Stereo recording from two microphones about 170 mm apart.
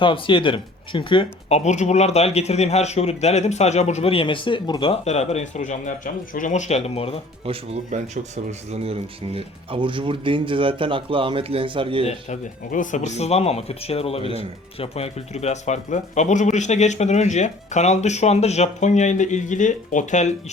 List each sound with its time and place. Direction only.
0.0 s speech: 30° left (ahead or behind)
7.4 s speech: 35° right (ahead or behind)
12.0 s speech: 45° left (ahead or behind)